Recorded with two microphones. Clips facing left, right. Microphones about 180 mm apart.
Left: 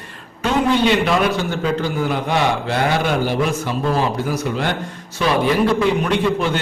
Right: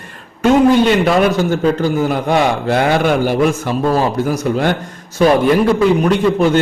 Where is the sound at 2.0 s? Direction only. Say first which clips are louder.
Right 5 dB; 45° right (ahead or behind).